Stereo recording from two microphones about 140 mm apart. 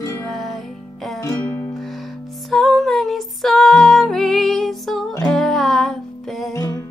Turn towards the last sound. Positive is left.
turn(degrees=25)  # may be behind; listen again after turning